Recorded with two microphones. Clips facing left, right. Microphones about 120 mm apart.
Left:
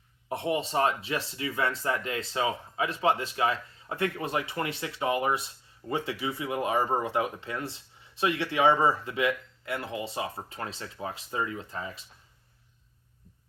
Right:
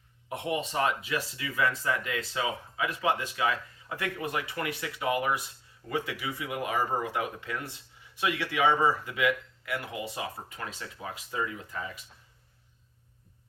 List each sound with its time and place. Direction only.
0.3 s speech: 30° left (ahead or behind)